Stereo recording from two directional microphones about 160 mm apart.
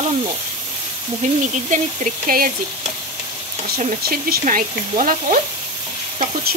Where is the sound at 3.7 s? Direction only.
70° right (ahead or behind).